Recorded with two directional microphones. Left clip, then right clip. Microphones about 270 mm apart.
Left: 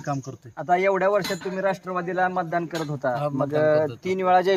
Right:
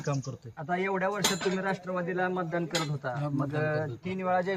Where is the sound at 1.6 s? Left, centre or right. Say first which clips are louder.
Left 7 dB; left.